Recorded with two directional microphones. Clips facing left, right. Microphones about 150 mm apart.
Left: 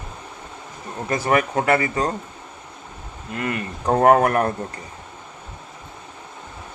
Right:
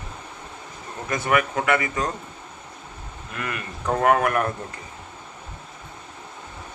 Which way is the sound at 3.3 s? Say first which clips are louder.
Left 6 dB; 30° left (ahead or behind).